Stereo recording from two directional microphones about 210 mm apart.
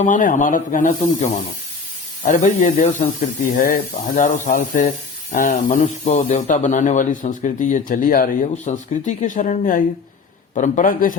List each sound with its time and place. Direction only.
0.0 s speech: 40° left (ahead or behind)